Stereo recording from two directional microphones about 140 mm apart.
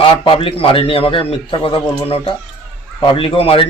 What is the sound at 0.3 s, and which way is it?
A man's voice, 40° left (ahead or behind).